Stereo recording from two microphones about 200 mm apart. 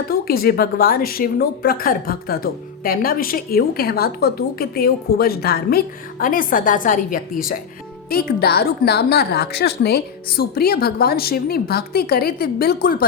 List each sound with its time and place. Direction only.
0.1 s a woman's voice: 50° left (ahead or behind)